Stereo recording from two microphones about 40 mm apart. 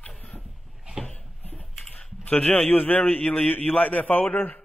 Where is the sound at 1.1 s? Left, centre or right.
Left.